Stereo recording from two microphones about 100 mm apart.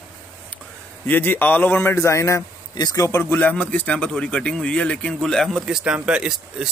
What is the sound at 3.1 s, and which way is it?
Speech, 20° left (ahead or behind).